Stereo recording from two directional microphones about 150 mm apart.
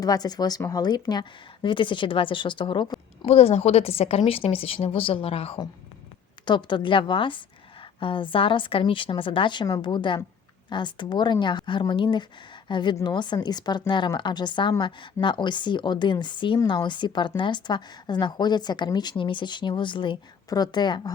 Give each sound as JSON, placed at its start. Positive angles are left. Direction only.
{"t": 0.0, "sound": "a woman's voice", "side_deg": 25}